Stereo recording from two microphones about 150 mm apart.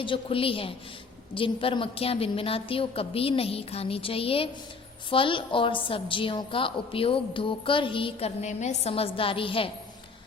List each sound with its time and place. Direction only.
0.0 s a woman's voice: 35° left (ahead or behind)